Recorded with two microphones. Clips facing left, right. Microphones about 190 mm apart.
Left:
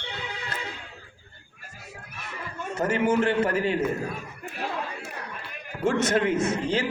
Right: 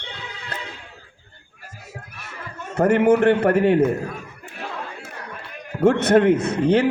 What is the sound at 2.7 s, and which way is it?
A man's voice, 60° right (ahead or behind).